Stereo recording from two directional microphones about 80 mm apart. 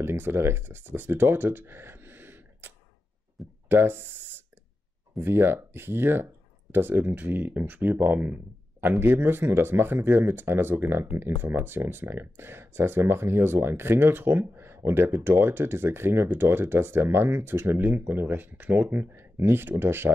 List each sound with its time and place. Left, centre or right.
0.0 s speech: right
3.6 s a sound: right
5.2 s speech: right